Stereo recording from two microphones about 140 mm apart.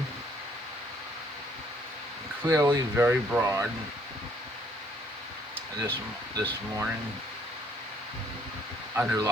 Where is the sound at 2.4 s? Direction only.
20° right (ahead or behind).